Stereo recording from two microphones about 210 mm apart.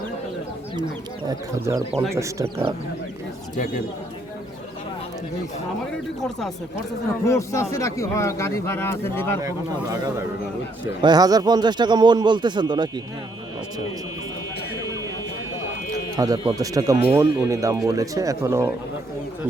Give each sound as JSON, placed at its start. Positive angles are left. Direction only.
{"t": 1.5, "sound": "speech", "side_deg": -15}
{"t": 7.3, "sound": "a man's voice", "side_deg": 15}
{"t": 9.4, "sound": "speech", "side_deg": -15}
{"t": 16.1, "sound": "speech", "side_deg": -15}